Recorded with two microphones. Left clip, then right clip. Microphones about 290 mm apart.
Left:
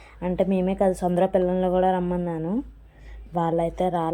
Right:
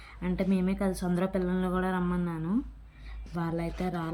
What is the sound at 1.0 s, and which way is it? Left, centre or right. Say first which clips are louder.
Speech: left 10 dB; left.